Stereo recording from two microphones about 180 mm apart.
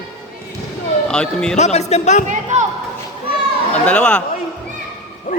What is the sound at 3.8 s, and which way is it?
Speech, 5° left (ahead or behind).